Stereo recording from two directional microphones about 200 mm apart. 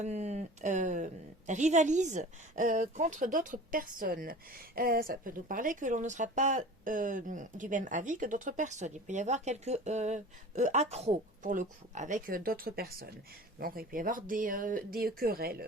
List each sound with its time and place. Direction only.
0.0 s a woman's voice: 35° right (ahead or behind)